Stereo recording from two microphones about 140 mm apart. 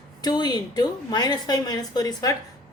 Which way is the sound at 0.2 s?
30° left (ahead or behind).